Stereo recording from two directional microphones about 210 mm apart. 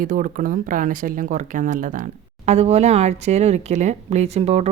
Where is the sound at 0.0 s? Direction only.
40° right (ahead or behind).